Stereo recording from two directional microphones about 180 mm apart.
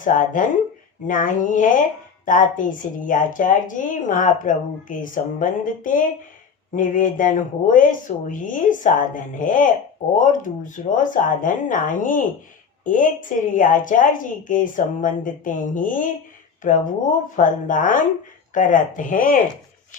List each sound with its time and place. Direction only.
0.0 s speech: 45° left (ahead or behind)